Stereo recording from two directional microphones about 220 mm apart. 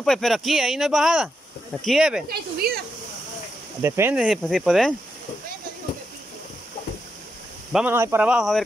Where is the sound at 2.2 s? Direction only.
45° right (ahead or behind).